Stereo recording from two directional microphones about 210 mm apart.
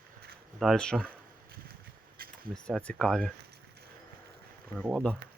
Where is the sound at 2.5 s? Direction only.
5° left (ahead or behind).